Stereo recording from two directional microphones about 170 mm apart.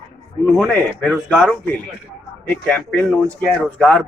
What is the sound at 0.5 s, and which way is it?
Speech, 5° left (ahead or behind).